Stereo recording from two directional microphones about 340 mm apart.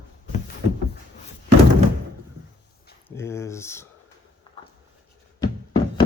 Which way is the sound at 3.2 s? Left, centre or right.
Centre.